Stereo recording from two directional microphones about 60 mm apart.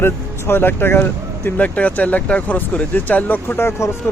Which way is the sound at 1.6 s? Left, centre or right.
Left.